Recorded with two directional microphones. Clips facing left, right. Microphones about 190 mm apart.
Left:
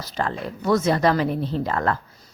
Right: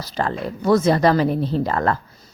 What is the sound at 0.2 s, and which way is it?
Speech, 35° right (ahead or behind).